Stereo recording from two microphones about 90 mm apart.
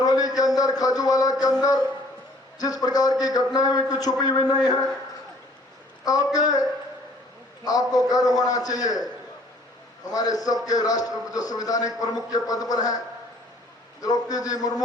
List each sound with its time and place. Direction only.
0.0 s a sound: 45° left (ahead or behind)
2.6 s a man's voice: 45° left (ahead or behind)
6.1 s a man's voice: 45° left (ahead or behind)
10.1 s a man's voice: 45° left (ahead or behind)
14.0 s a man's voice: 45° left (ahead or behind)